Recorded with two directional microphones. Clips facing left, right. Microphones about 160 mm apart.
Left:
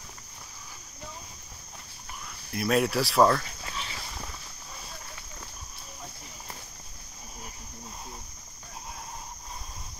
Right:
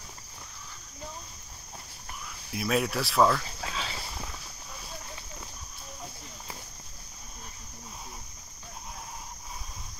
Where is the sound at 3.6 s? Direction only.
90° right.